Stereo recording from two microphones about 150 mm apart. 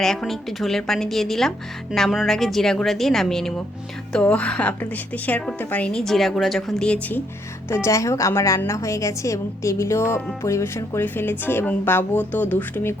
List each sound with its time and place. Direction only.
0.0 s a woman's voice: centre (ahead or behind)
7.7 s a woman's voice: 20° left (ahead or behind)